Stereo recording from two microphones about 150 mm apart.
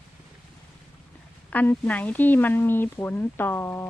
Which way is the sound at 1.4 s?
10° left (ahead or behind).